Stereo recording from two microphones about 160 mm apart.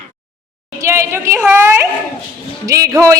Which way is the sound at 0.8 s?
15° right (ahead or behind).